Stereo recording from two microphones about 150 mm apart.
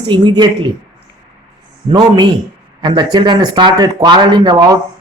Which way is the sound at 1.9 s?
30° right (ahead or behind).